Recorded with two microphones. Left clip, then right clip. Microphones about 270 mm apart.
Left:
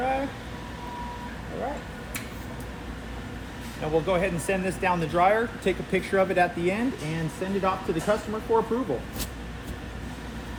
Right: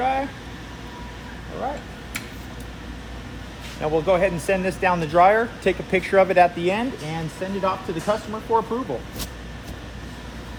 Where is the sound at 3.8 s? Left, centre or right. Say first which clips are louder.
Right 5 dB; right.